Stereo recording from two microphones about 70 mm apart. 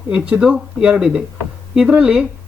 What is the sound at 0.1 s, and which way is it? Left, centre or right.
Speech, centre.